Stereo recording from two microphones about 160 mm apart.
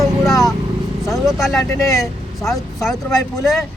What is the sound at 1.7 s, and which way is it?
Speech, 20° left (ahead or behind).